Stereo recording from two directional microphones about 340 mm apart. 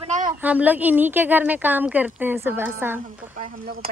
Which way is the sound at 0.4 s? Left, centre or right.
Centre.